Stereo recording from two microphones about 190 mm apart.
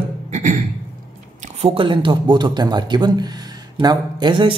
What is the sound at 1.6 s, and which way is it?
A man's voice, 30° right (ahead or behind).